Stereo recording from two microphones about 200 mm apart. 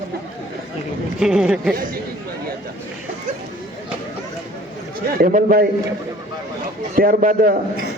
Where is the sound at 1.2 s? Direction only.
5° right (ahead or behind).